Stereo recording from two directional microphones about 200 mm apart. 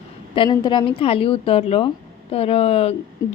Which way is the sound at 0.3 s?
20° left (ahead or behind).